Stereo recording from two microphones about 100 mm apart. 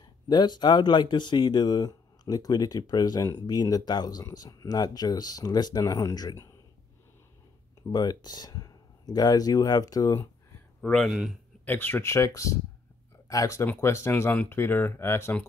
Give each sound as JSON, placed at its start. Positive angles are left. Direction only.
{"t": 0.3, "sound": "speech", "side_deg": 45}
{"t": 7.9, "sound": "speech", "side_deg": 40}
{"t": 10.8, "sound": "speech", "side_deg": 5}
{"t": 11.1, "sound": "a man's voice", "side_deg": -5}
{"t": 11.6, "sound": "speech", "side_deg": 20}